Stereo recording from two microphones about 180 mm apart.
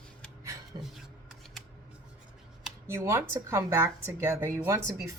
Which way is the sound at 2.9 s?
15° right (ahead or behind).